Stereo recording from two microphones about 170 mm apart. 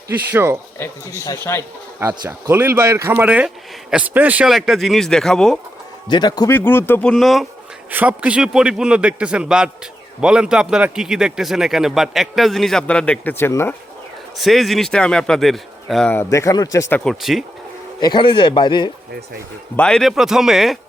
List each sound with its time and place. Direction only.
0.3 s speech: 15° right (ahead or behind)
1.5 s speech: 15° left (ahead or behind)
2.0 s speech: 15° right (ahead or behind); by 5.5 s 5° left (ahead or behind)
6.1 s speech: 25° left (ahead or behind)
6.5 s a man's voice: 10° left (ahead or behind)
14.3 s a man's voice: centre (ahead or behind)
16.1 s speech: 20° left (ahead or behind)
17.0 s a man's voice: centre (ahead or behind)
18.0 s speech: 25° left (ahead or behind)
19.7 s a man's voice: 5° left (ahead or behind)